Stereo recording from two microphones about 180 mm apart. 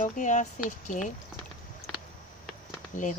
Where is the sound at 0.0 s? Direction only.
45° left (ahead or behind).